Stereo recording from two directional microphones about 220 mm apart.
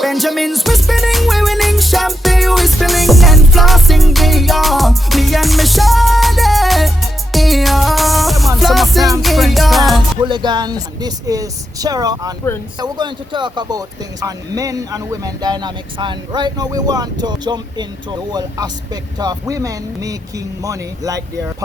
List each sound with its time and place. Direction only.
0.0 s music: centre (ahead or behind)
10.2 s speech: 20° right (ahead or behind)